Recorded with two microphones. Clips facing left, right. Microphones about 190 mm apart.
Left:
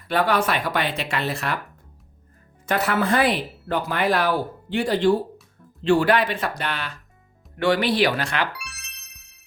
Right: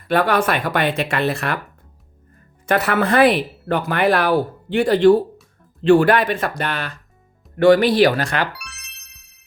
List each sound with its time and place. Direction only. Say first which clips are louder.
0.1 s speech: right 4 dB; 55° right (ahead or behind)
2.6 s speech: right 4 dB; 60° right (ahead or behind); by 8.4 s 40° right (ahead or behind)
8.5 s music: left 1 dB; centre (ahead or behind)